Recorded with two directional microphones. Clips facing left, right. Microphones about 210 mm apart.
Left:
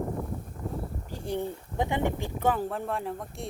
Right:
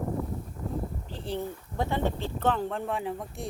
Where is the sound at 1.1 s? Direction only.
15° left (ahead or behind).